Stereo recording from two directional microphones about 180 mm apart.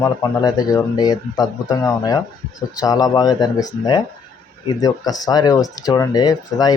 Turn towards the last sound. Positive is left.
turn(degrees=20)  # may be behind; listen again after turning